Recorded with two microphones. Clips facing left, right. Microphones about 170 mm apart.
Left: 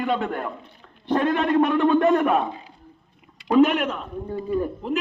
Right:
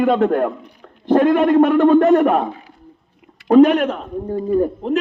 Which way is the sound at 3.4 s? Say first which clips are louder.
Right 7 dB; 40° right (ahead or behind).